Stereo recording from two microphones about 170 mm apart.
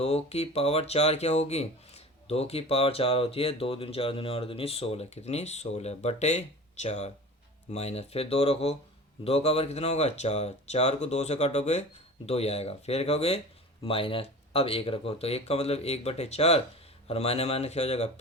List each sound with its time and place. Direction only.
0.0 s speech: 40° left (ahead or behind)